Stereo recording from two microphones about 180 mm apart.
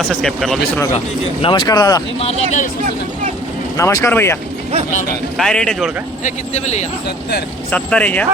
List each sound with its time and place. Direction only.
0.1 s a man's voice: centre (ahead or behind)
0.9 s speech: 30° left (ahead or behind)
2.1 s speech: 35° left (ahead or behind)
3.8 s speech: 15° left (ahead or behind)
5.4 s a man's voice: 5° left (ahead or behind)
6.2 s speech: 40° left (ahead or behind)
7.7 s speech: 5° left (ahead or behind)